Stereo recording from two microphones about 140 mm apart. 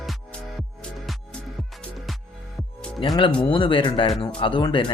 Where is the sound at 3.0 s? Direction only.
35° left (ahead or behind).